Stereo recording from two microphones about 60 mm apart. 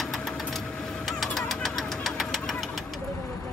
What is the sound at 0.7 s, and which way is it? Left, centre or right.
Printer, centre.